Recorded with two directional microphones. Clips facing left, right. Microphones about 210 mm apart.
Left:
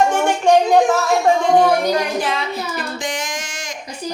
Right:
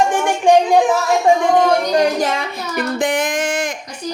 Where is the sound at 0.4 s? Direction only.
15° right (ahead or behind).